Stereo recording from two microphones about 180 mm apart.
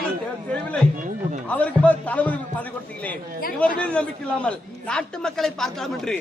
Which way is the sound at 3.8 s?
5° left (ahead or behind).